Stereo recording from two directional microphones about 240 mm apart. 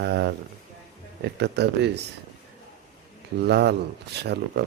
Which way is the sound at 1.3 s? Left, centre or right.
Right.